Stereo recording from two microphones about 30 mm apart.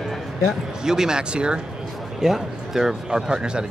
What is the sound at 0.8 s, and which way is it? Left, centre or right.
Speech, right.